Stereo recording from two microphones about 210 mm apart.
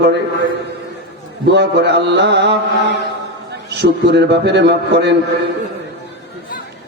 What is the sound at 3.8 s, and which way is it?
A man's voice, 55° right (ahead or behind).